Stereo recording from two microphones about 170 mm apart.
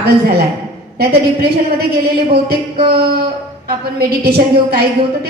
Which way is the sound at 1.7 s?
65° right (ahead or behind).